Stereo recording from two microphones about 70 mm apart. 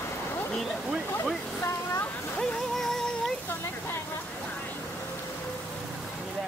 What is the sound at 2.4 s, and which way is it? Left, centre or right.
Music, centre.